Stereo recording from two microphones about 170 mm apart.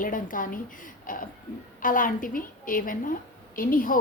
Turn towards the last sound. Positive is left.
turn(degrees=55)  # may be behind; listen again after turning